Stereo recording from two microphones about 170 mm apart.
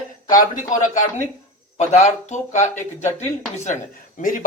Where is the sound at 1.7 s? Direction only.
45° left (ahead or behind).